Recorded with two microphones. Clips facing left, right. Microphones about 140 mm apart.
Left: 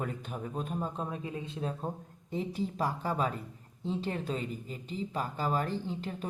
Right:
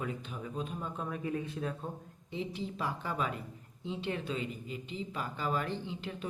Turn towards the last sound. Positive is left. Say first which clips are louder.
# left 3 dB
turn(degrees=40)  # may be behind; listen again after turning